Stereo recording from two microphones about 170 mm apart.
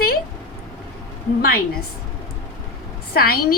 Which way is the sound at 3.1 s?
65° left (ahead or behind).